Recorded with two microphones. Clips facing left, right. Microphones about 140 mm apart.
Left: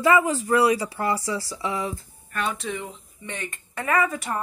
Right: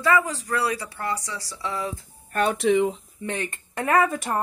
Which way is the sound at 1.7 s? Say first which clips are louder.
Left 1 dB; 5° left (ahead or behind).